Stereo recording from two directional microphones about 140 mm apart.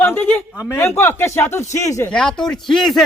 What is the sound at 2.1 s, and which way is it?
Speech, 5° left (ahead or behind).